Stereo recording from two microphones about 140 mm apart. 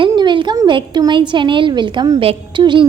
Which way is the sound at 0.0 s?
35° right (ahead or behind).